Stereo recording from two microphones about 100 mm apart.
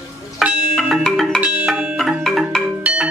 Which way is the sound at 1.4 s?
10° right (ahead or behind).